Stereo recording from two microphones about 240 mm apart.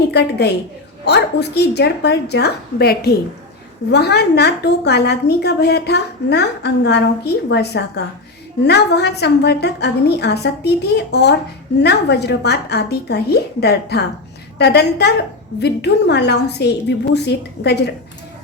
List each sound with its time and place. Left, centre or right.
0.1 s a woman's voice: left